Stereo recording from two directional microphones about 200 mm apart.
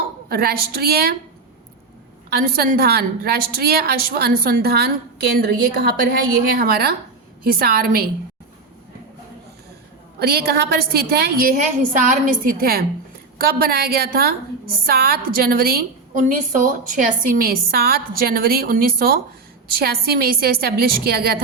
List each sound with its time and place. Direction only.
0.3 s a woman's voice: 50° right (ahead or behind)
2.3 s a woman's voice: 50° right (ahead or behind)
10.2 s a woman's voice: 50° right (ahead or behind)